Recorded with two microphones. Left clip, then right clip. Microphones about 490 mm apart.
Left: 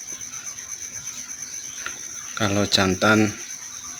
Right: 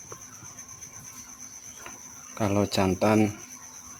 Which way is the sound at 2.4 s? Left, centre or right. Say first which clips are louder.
Left 5 dB; right.